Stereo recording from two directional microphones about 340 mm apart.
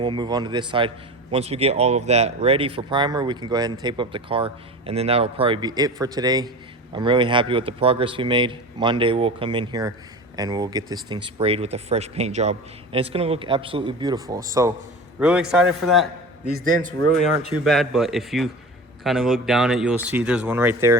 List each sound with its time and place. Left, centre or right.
0.0 s a man's voice: centre